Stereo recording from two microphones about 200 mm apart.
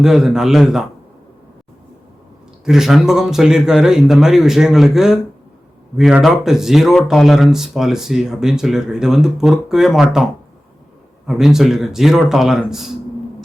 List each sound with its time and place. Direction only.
0.0 s speech: 5° right (ahead or behind)
2.6 s speech: centre (ahead or behind)
11.3 s speech: centre (ahead or behind)